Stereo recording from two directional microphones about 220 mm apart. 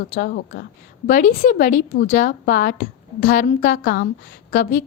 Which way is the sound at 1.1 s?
35° left (ahead or behind).